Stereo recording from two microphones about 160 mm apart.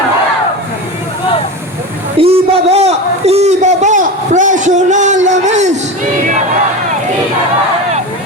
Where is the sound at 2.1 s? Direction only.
35° right (ahead or behind).